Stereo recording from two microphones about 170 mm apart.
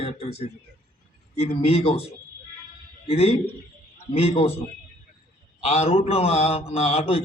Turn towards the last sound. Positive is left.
turn(degrees=35)  # may be behind; listen again after turning